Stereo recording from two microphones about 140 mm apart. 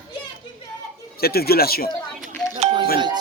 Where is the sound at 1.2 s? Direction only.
90° left.